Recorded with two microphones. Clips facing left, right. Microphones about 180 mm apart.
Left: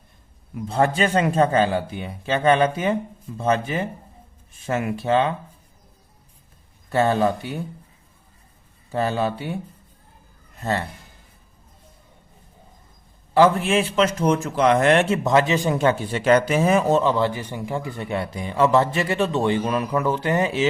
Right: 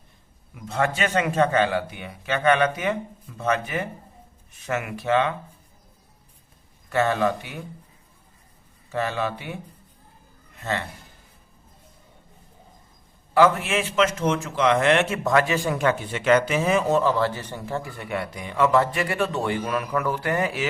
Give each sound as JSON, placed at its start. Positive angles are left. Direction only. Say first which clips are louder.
{"t": 0.5, "sound": "a man's voice", "louder": "left 4 dB", "side_deg": 30}
{"t": 6.9, "sound": "a man's voice", "louder": "left 3 dB", "side_deg": 30}
{"t": 8.9, "sound": "a man's voice", "louder": "left 4 dB", "side_deg": 35}
{"t": 10.6, "sound": "a man's voice", "louder": "left 4 dB", "side_deg": 35}
{"t": 13.3, "sound": "a man's voice", "louder": "left 2 dB", "side_deg": 30}
{"t": 17.0, "sound": "a man's voice", "louder": "left 2 dB", "side_deg": 20}